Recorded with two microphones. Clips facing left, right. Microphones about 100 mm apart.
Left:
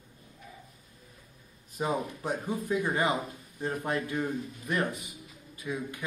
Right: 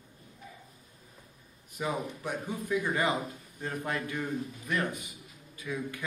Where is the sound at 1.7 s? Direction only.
30° left (ahead or behind).